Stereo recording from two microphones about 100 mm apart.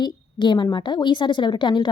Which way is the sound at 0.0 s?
50° left (ahead or behind).